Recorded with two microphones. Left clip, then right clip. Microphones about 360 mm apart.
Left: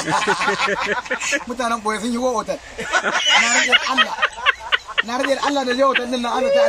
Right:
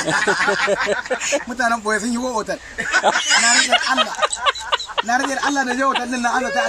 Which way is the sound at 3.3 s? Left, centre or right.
Centre.